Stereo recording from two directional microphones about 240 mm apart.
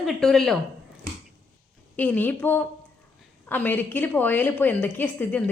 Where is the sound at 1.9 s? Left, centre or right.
Centre.